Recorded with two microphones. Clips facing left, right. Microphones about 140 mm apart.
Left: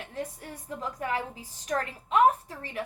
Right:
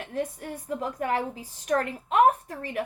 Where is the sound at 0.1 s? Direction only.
45° right (ahead or behind).